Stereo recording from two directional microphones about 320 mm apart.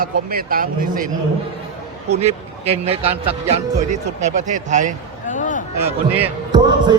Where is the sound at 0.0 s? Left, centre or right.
Right.